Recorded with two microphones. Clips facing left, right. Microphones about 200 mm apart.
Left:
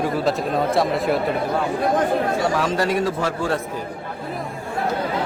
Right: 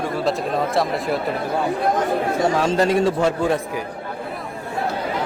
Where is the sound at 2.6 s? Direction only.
25° right (ahead or behind).